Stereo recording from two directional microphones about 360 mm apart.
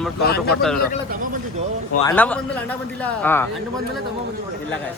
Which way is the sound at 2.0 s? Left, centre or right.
Centre.